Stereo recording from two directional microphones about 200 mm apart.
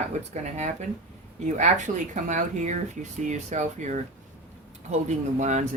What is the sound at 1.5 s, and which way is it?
Speech, 40° right (ahead or behind).